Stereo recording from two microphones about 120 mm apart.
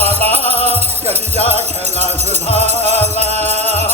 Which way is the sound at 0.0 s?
60° right (ahead or behind).